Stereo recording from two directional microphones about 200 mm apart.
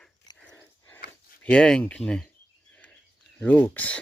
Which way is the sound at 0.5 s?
10° left (ahead or behind).